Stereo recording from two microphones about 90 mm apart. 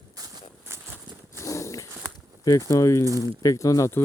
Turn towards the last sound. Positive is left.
turn(degrees=35)  # may be behind; listen again after turning